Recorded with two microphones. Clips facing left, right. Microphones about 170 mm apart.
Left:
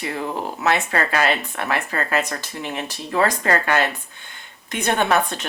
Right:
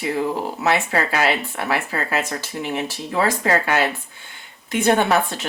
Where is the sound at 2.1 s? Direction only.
20° right (ahead or behind).